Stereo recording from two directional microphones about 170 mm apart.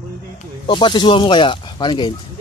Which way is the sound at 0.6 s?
30° left (ahead or behind).